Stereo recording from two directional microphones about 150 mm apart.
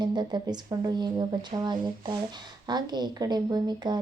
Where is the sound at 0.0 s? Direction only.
30° right (ahead or behind).